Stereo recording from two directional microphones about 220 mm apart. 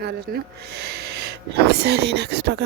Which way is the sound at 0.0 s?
45° right (ahead or behind).